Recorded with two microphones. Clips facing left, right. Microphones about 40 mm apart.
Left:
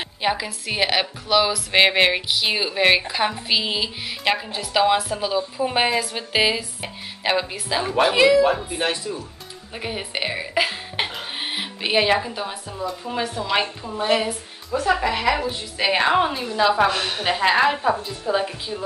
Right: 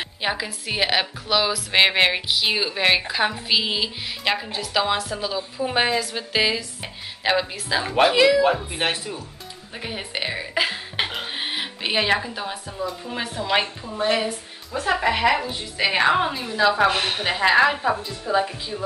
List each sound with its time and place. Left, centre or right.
0.2 s a woman's voice: centre
8.6 s speech: right
9.8 s a woman's voice: centre
14.7 s speech: centre
15.3 s a woman's voice: centre
16.9 s speech: right
17.2 s a woman's voice: centre